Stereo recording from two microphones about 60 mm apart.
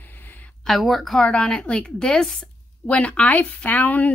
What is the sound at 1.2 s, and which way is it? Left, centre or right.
Speech, centre.